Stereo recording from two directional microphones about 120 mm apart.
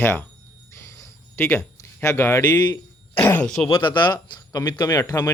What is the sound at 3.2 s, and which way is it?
Speech, 15° left (ahead or behind).